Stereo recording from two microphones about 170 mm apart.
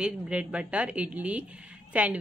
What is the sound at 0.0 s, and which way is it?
A woman's voice, 5° right (ahead or behind).